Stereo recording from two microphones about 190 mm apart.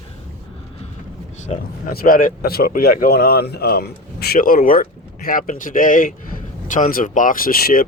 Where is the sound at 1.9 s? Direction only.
50° left (ahead or behind).